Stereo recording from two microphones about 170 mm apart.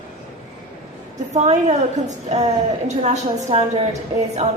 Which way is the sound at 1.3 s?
40° right (ahead or behind).